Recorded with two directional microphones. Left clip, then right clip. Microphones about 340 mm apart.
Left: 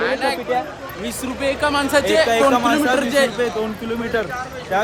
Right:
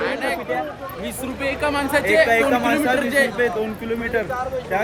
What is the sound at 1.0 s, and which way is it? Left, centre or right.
Speech, centre.